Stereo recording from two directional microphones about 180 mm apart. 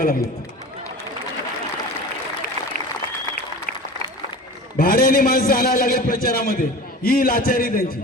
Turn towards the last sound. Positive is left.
turn(degrees=50)  # may be behind; listen again after turning